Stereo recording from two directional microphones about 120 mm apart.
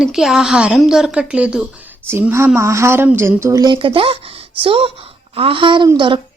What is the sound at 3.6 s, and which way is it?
Speech, 40° right (ahead or behind).